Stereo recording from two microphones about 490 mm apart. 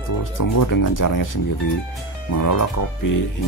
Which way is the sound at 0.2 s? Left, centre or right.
Left.